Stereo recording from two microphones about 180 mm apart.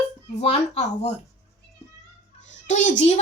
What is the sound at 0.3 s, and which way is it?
Speech, 35° left (ahead or behind).